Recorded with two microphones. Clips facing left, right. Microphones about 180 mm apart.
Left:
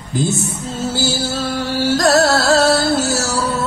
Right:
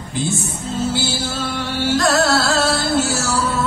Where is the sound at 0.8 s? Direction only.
40° left (ahead or behind).